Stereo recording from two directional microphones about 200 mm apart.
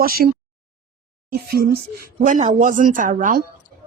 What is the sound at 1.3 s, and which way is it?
Speech, 50° right (ahead or behind).